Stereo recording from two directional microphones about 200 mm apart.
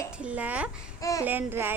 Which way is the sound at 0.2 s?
5° right (ahead or behind).